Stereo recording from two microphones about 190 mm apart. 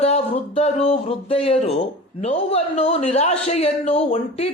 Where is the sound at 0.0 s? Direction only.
35° left (ahead or behind).